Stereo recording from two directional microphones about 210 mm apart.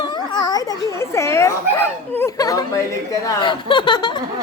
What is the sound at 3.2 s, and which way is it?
Chuckle, 20° left (ahead or behind).